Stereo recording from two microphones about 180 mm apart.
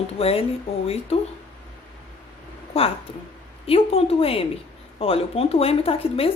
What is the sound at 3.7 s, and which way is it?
Speech, 30° left (ahead or behind).